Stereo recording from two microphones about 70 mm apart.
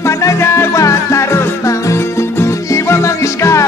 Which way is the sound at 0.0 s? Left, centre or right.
Left.